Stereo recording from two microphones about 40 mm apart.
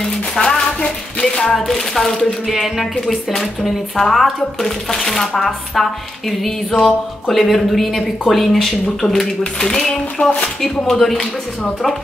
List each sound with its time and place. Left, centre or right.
0.5 s a sound: centre
2.4 s speech: centre
5.4 s music: centre
9.6 s speech: centre
10.2 s speech: left
10.9 s speech: centre